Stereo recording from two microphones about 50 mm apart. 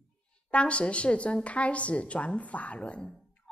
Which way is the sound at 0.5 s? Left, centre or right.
Left.